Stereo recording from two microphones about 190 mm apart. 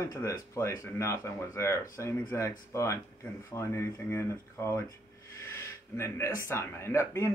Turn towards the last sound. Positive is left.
turn(degrees=15)  # may be behind; listen again after turning